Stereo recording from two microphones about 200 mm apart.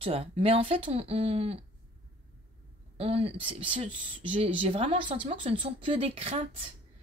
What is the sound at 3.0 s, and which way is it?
Speech, 30° right (ahead or behind).